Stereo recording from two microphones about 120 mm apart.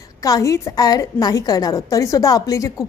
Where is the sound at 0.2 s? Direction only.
30° left (ahead or behind).